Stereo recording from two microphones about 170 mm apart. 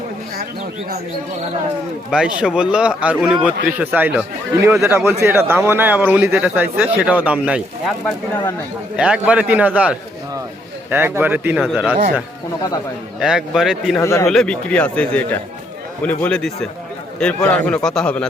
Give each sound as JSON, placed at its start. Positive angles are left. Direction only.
{"t": 2.0, "sound": "a man's voice", "side_deg": -5}
{"t": 9.0, "sound": "a man's voice", "side_deg": -5}
{"t": 11.6, "sound": "a man's voice", "side_deg": 0}
{"t": 13.1, "sound": "a man's voice", "side_deg": -5}
{"t": 14.0, "sound": "speech", "side_deg": 15}
{"t": 14.3, "sound": "a man's voice", "side_deg": 5}